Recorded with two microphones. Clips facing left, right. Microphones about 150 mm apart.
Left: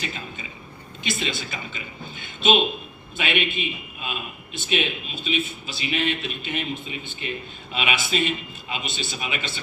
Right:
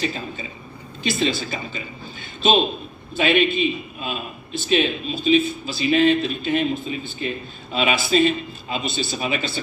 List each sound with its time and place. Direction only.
0.0 s a man's voice: 35° right (ahead or behind)